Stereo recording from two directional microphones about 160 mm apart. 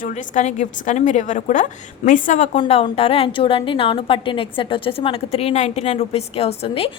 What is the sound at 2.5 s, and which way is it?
A woman's voice, 35° left (ahead or behind).